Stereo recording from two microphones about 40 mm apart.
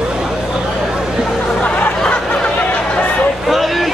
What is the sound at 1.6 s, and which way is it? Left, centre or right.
Music, left.